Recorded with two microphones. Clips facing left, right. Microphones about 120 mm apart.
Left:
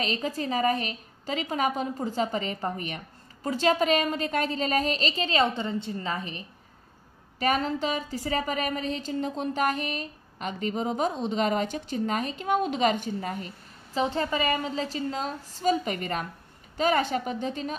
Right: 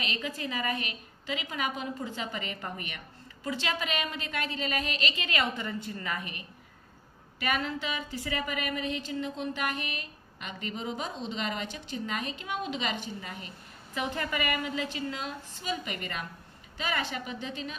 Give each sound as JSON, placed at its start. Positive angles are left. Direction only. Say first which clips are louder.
{"t": 0.0, "sound": "a woman's voice", "louder": "left 6 dB", "side_deg": 40}
{"t": 13.9, "sound": "a woman's voice", "louder": "left 6 dB", "side_deg": 30}